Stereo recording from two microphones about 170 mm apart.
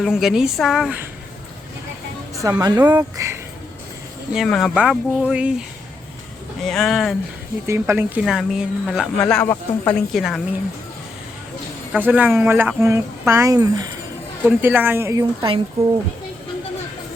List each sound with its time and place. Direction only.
0.0 s speech: centre (ahead or behind)
2.4 s speech: 20° right (ahead or behind)
4.4 s speech: centre (ahead or behind)
6.7 s speech: centre (ahead or behind)
7.7 s speech: 15° right (ahead or behind)
8.2 s speech: centre (ahead or behind)
11.9 s speech: 10° right (ahead or behind)
14.4 s speech: 10° right (ahead or behind); by 15.6 s 25° right (ahead or behind)